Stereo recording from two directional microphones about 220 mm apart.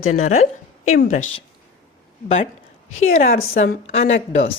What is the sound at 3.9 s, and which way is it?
Speech, 30° left (ahead or behind).